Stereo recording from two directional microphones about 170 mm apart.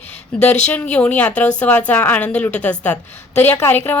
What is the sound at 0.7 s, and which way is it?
A woman's voice, 10° left (ahead or behind).